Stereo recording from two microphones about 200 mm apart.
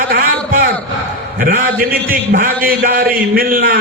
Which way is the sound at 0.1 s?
45° right (ahead or behind).